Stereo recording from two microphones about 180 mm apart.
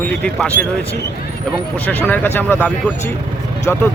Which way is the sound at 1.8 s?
10° left (ahead or behind).